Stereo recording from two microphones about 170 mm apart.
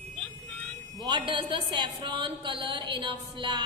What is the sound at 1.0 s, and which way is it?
A woman's voice, 30° right (ahead or behind).